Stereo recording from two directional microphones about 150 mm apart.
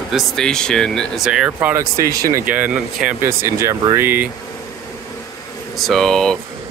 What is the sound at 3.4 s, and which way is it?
Speech, 20° right (ahead or behind).